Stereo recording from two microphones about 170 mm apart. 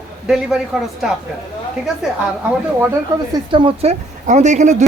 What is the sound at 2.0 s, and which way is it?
Speech, 5° right (ahead or behind).